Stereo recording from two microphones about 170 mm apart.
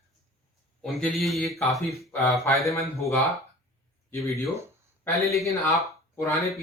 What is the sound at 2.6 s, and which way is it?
Speech, 15° left (ahead or behind).